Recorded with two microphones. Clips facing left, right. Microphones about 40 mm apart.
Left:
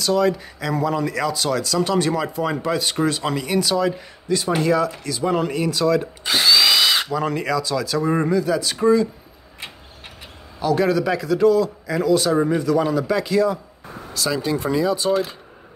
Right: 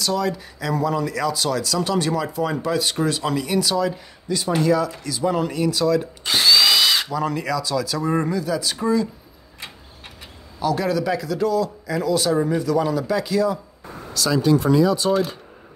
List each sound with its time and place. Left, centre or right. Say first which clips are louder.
0.0 s speech: left 4 dB; centre
4.3 s speech: even; left
6.3 s drill: even; centre
7.1 s speech: left 1 dB; left
10.6 s speech: left 3 dB; centre